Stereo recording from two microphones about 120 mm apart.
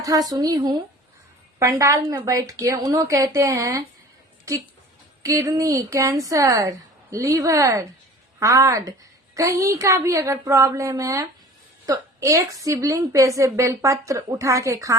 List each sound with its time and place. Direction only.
0.0 s a woman's voice: 30° right (ahead or behind)